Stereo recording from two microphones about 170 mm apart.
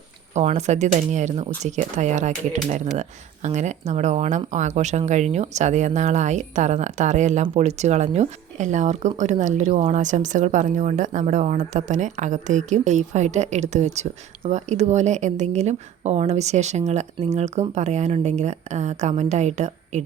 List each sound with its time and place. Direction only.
0.3 s speech: 40° right (ahead or behind)